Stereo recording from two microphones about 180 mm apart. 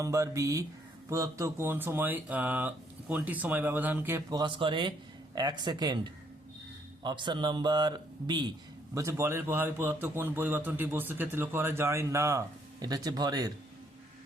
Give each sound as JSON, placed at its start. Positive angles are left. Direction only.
{"t": 0.0, "sound": "speech", "side_deg": -15}
{"t": 7.0, "sound": "a man's voice", "side_deg": -25}